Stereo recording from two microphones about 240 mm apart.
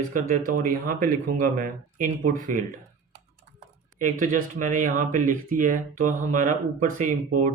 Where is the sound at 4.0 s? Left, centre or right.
Right.